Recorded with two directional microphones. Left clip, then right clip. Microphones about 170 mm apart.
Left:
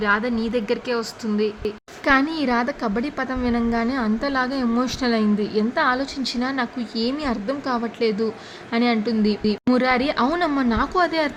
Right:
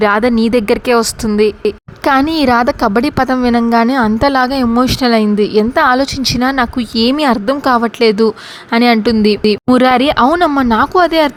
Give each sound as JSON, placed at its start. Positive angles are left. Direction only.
{"t": 0.0, "sound": "a woman's voice", "side_deg": -50}